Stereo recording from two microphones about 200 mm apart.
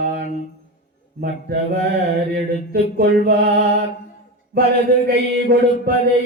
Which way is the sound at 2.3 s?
45° right (ahead or behind).